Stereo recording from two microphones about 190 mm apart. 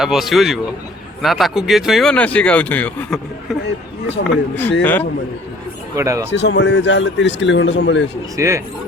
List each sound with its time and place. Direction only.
0.0 s speech: centre (ahead or behind)
4.2 s speech: 50° left (ahead or behind)
4.8 s a man's voice: 10° left (ahead or behind)
6.0 s speech: 15° right (ahead or behind)
6.3 s speech: 65° left (ahead or behind)
8.4 s speech: 15° right (ahead or behind)